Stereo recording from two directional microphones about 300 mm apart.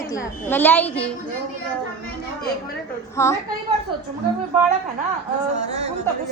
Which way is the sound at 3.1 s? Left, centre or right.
Centre.